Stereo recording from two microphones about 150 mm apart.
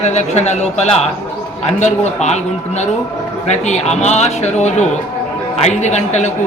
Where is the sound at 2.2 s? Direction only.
50° left (ahead or behind).